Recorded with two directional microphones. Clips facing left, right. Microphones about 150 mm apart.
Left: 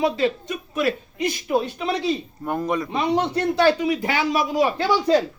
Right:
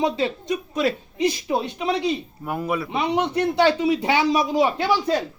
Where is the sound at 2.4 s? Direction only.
5° right (ahead or behind); by 4.9 s 25° right (ahead or behind).